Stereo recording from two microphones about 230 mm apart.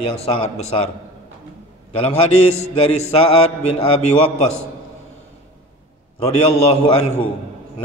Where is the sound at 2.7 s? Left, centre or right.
Left.